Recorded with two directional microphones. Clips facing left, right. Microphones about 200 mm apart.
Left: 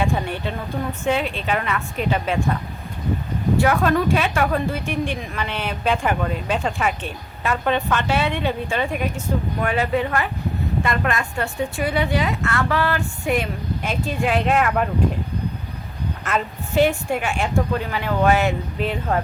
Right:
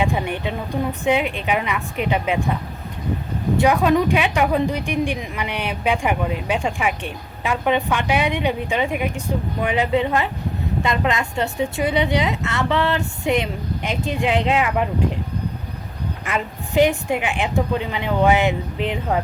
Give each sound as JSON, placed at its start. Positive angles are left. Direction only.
{"t": 0.0, "sound": "a woman's voice", "side_deg": -15}
{"t": 3.6, "sound": "a woman's voice", "side_deg": -15}
{"t": 16.2, "sound": "a woman's voice", "side_deg": -15}